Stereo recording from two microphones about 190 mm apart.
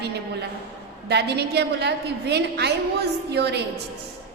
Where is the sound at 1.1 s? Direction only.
60° right (ahead or behind).